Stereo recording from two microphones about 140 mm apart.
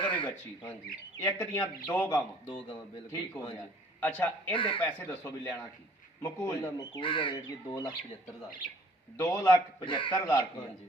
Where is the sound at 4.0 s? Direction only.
10° left (ahead or behind).